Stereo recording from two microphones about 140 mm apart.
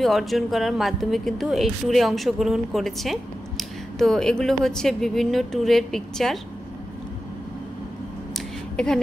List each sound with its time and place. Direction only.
0.0 s a woman's voice: centre (ahead or behind)
8.7 s speech: 5° left (ahead or behind)